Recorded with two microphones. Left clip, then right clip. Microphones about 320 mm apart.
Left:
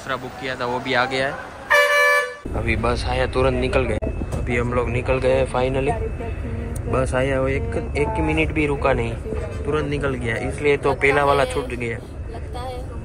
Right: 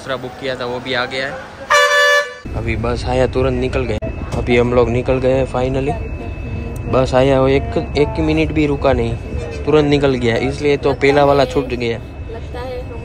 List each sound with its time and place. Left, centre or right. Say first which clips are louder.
0.1 s speech: right 5 dB; centre
1.7 s vehicle: right 4 dB; right
2.6 s speech: right 2 dB; centre